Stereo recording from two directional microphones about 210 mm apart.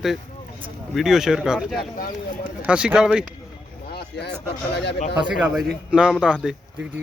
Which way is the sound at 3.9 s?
50° left (ahead or behind).